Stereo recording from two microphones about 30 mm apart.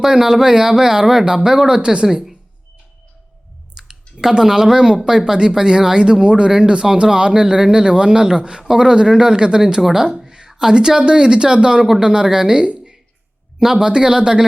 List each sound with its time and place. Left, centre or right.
0.0 s speech: centre
1.8 s speech: right
3.8 s speech: centre
8.6 s speech: centre
9.8 s speech: centre
10.2 s a sound: right
10.6 s speech: right
13.8 s speech: right